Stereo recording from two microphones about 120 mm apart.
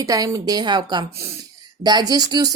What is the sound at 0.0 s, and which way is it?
A woman's voice, 30° right (ahead or behind).